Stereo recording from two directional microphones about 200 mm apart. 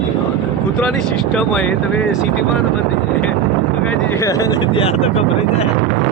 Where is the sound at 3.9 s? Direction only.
15° left (ahead or behind).